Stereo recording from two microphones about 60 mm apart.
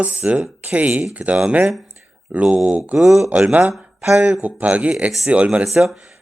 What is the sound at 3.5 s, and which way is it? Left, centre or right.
Speech, right.